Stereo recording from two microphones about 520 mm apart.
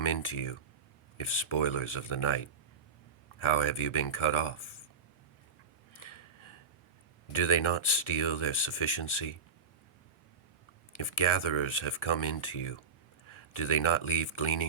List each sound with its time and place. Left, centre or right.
0.0 s speech: left
6.0 s gasp: left
7.3 s speech: left
10.9 s speech: left